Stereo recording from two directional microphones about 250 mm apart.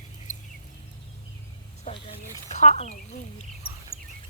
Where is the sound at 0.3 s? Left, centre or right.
Left.